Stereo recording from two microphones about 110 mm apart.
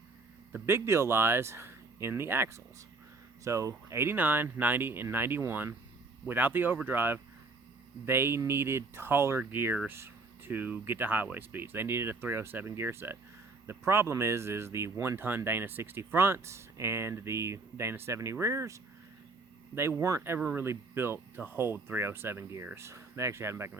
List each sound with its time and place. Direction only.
0.5 s speech: 25° right (ahead or behind)